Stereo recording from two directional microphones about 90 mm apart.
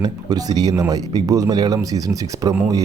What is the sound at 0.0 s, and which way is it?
Speech, 45° right (ahead or behind).